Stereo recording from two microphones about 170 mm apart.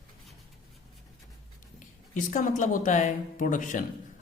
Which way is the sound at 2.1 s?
50° left (ahead or behind).